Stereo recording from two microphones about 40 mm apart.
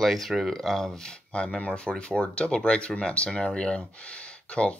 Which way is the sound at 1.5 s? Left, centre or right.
Left.